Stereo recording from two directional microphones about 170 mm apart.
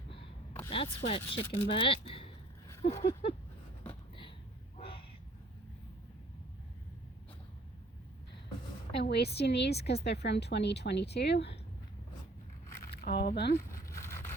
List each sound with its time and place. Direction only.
0.7 s speech: 35° left (ahead or behind)
9.0 s a woman's voice: 75° left (ahead or behind)
12.9 s speech: 75° left (ahead or behind)
13.6 s a sound: 15° left (ahead or behind)